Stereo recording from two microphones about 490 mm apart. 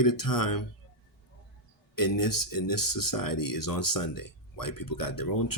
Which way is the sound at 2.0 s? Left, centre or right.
Left.